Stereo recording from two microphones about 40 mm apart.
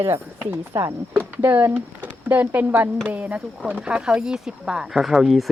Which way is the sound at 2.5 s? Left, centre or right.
Right.